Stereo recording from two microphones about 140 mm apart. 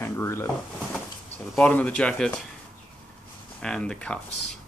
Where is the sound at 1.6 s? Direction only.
10° left (ahead or behind).